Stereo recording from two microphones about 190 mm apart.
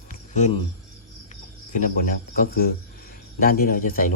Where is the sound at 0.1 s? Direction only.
40° left (ahead or behind).